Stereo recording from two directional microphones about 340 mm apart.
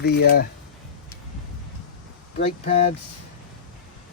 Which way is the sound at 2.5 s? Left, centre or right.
Centre.